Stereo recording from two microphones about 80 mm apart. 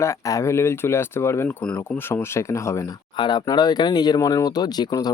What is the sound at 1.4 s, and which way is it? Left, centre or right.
Speech, centre.